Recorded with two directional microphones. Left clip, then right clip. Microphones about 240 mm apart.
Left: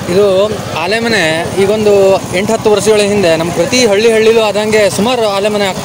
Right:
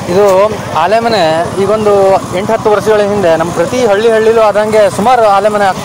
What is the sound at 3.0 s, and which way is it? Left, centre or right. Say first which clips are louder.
Speech: right 1 dB; centre.